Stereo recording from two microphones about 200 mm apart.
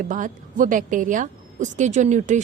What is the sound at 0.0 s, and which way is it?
A woman's voice, 40° right (ahead or behind).